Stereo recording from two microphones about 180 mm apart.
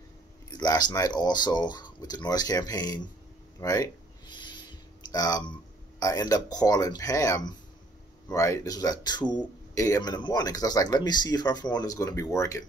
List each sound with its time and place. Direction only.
0.5 s speech: 20° left (ahead or behind)
3.6 s a sound: 20° left (ahead or behind)
5.9 s speech: 20° left (ahead or behind)